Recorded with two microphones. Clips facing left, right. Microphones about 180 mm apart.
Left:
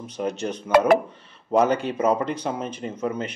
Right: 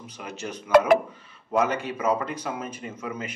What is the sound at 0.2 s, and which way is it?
Speech, 35° left (ahead or behind).